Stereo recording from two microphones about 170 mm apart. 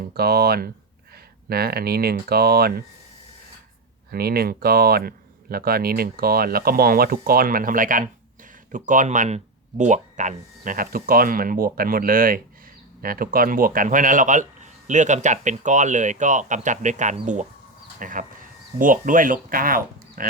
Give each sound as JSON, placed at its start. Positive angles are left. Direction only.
{"t": 0.1, "sound": "speech", "side_deg": -65}
{"t": 4.1, "sound": "a man's voice", "side_deg": -65}